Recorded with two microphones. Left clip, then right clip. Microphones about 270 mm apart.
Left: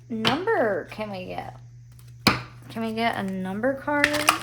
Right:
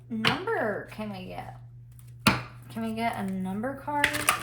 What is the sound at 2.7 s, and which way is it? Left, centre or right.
Speech, left.